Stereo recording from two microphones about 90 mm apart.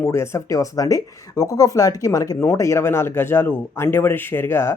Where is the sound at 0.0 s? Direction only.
30° left (ahead or behind).